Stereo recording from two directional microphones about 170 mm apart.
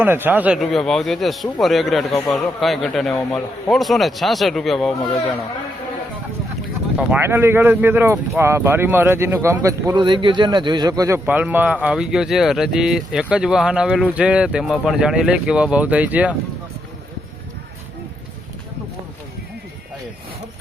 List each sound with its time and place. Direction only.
0.0 s speech: 10° right (ahead or behind)
6.9 s speech: 10° right (ahead or behind)
11.3 s speech: 10° right (ahead or behind)